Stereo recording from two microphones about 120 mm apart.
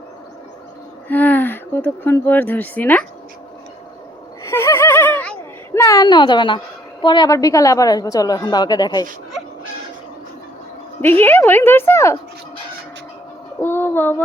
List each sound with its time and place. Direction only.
1.0 s speech: 15° left (ahead or behind)
4.4 s a sound: 20° left (ahead or behind)
5.7 s a sound: 25° left (ahead or behind)
7.0 s a woman's voice: 40° left (ahead or behind)
7.3 s a woman's voice: 30° left (ahead or behind)
11.0 s a woman's voice: 15° left (ahead or behind)
13.6 s child singing: 20° left (ahead or behind)